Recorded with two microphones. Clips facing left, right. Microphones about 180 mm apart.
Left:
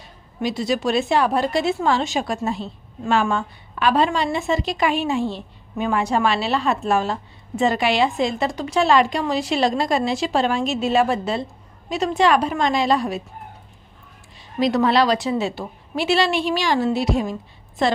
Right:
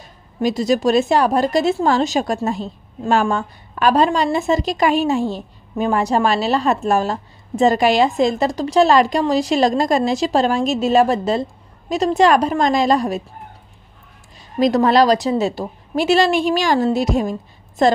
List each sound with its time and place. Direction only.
0.4 s a woman's voice: 45° right (ahead or behind)
14.6 s a woman's voice: 45° right (ahead or behind)